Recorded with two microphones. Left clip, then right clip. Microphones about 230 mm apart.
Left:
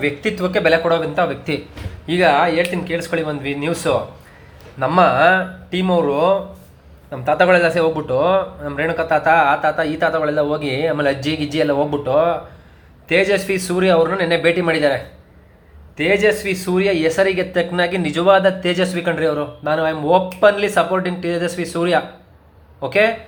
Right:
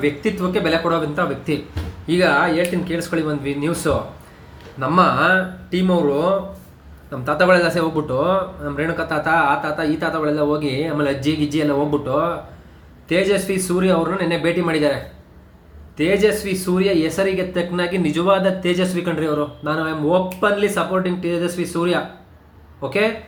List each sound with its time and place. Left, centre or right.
0.2 s speech: centre
16.0 s speech: centre